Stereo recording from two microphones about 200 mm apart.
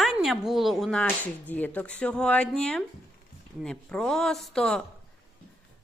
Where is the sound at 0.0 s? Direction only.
Centre (ahead or behind).